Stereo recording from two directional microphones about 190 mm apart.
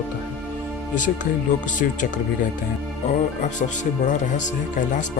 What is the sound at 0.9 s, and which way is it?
Speech, 40° left (ahead or behind).